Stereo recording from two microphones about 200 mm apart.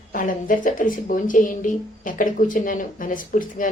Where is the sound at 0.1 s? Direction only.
45° left (ahead or behind).